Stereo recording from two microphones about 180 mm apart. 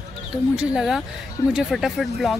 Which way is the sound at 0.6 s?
5° right (ahead or behind).